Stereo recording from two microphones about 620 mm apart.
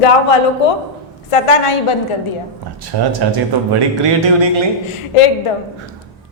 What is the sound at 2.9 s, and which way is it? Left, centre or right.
Speech, right.